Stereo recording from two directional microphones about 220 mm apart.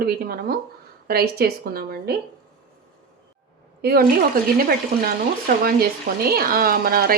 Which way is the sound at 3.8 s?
45° right (ahead or behind).